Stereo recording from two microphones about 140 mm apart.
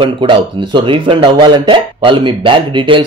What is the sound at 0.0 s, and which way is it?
Speech, 35° right (ahead or behind).